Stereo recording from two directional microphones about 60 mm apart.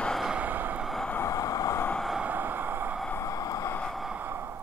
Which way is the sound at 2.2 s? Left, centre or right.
Right.